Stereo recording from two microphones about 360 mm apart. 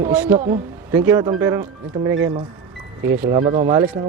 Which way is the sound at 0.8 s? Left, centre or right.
Centre.